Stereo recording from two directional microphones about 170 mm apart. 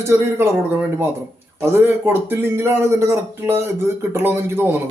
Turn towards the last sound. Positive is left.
turn(degrees=-15)  # may be behind; listen again after turning